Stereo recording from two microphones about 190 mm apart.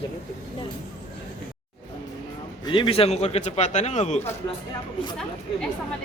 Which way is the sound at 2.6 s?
25° left (ahead or behind).